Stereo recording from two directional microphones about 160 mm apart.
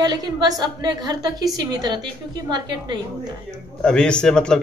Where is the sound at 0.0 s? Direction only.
25° right (ahead or behind).